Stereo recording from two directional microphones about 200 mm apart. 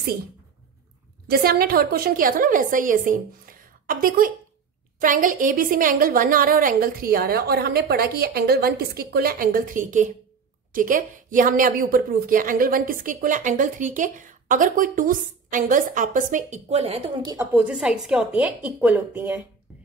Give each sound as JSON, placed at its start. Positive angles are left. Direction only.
{"t": 1.3, "sound": "a woman's voice", "side_deg": -50}
{"t": 17.3, "sound": "a woman's voice", "side_deg": -10}